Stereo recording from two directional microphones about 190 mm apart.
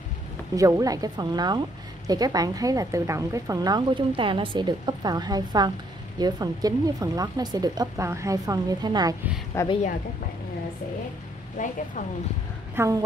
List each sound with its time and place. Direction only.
0.6 s speech: 20° right (ahead or behind)
9.5 s a woman's voice: 15° left (ahead or behind)
11.5 s speech: 40° left (ahead or behind)
12.7 s speech: 15° right (ahead or behind)